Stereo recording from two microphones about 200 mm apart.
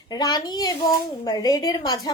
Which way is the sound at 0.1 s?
20° left (ahead or behind).